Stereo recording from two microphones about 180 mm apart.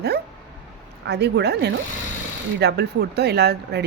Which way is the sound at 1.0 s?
70° right (ahead or behind).